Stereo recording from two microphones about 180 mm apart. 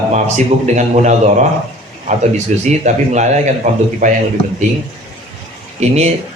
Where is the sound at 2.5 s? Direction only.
40° right (ahead or behind).